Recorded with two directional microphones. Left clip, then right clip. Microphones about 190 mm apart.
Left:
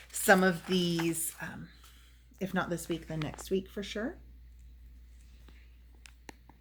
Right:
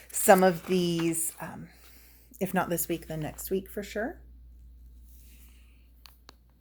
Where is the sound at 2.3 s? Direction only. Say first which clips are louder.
Right 5 dB; 35° right (ahead or behind).